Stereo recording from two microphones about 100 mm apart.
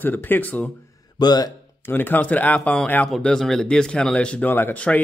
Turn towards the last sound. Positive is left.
turn(degrees=15)  # may be behind; listen again after turning